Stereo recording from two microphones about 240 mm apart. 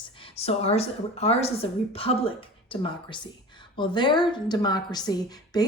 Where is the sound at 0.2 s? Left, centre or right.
Left.